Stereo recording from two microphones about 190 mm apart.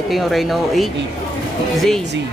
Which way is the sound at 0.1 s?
Centre (ahead or behind).